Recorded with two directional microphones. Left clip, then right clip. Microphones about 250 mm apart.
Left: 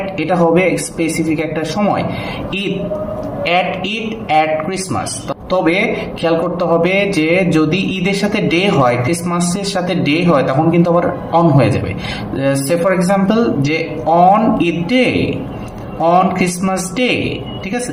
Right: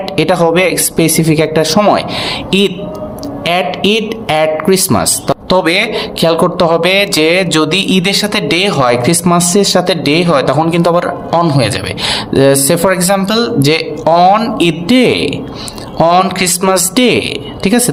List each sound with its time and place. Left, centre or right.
0.2 s a man's voice: right
3.4 s a man's voice: right